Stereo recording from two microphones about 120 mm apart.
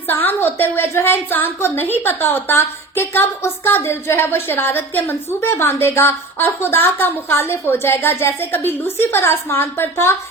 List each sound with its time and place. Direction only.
0.1 s a woman's voice: 15° left (ahead or behind)